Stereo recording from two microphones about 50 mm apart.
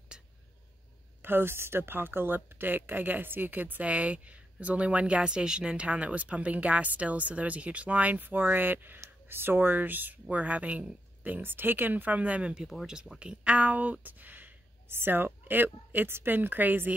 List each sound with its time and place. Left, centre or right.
1.2 s speech: right
11.4 s speech: right
14.9 s a woman's voice: right